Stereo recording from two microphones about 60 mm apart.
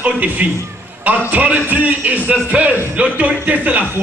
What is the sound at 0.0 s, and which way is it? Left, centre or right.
Speech, right.